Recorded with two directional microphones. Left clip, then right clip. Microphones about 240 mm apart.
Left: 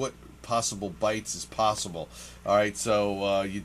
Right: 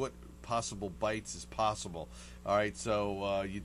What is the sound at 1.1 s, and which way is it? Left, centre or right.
Speech, centre.